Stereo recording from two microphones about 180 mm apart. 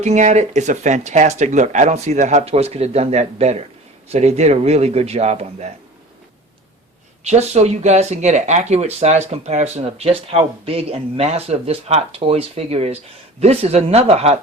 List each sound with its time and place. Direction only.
0.0 s speech: 40° right (ahead or behind)
7.3 s speech: 40° right (ahead or behind)